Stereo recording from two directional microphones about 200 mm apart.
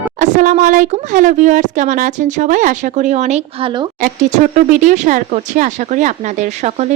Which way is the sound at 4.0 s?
40° right (ahead or behind).